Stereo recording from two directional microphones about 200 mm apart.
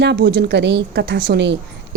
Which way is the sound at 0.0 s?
55° right (ahead or behind).